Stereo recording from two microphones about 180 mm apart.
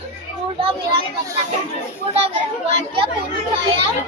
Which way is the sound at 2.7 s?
30° right (ahead or behind).